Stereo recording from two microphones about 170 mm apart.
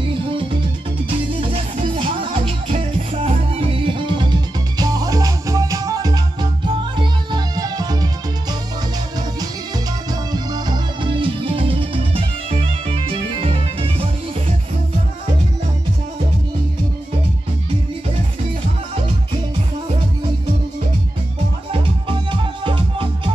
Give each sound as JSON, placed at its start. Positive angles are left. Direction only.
{"t": 0.1, "sound": "music", "side_deg": -30}
{"t": 10.3, "sound": "music", "side_deg": -25}
{"t": 21.7, "sound": "music", "side_deg": -30}